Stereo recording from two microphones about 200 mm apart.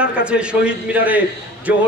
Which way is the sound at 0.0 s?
5° right (ahead or behind).